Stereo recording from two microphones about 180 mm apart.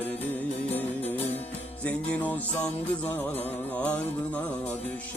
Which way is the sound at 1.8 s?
10° left (ahead or behind).